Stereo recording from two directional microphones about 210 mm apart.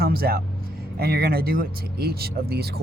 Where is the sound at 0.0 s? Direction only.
45° right (ahead or behind).